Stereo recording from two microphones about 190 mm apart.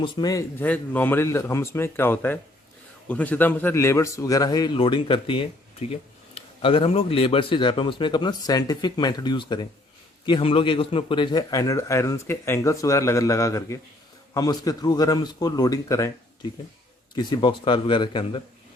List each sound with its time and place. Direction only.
0.0 s speech: 20° left (ahead or behind)
0.6 s a man's voice: 10° left (ahead or behind); by 18.4 s 25° left (ahead or behind)